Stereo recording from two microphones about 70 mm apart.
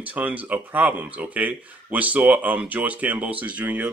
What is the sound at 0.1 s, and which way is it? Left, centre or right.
Speech, right.